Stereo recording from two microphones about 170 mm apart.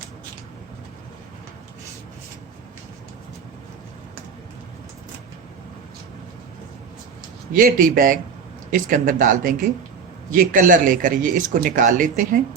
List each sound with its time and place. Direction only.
7.5 s speech: 50° right (ahead or behind)